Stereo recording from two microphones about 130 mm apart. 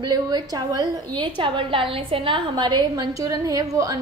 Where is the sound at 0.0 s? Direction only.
30° right (ahead or behind).